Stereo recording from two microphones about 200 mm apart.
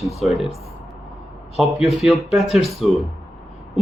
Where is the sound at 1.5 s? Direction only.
Centre (ahead or behind).